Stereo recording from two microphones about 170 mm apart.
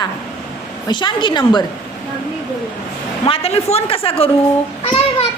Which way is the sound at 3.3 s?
35° left (ahead or behind).